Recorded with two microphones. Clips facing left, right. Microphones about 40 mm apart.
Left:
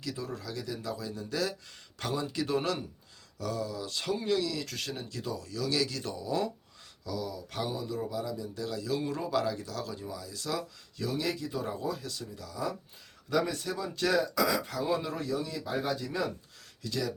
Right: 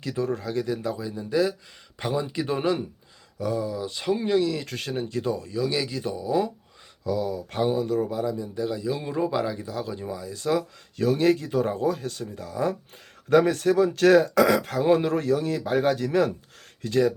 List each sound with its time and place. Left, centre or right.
0.0 s speech: right; by 6.5 s centre
7.0 s speech: right
7.9 s speech: right
13.3 s speech: right
16.8 s speech: right